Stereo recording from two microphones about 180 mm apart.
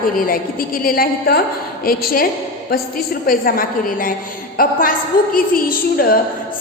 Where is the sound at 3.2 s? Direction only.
55° left (ahead or behind).